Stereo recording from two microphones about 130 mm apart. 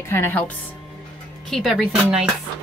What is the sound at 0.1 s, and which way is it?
Speech, 15° left (ahead or behind).